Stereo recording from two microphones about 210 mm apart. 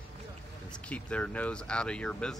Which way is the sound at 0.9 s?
5° left (ahead or behind).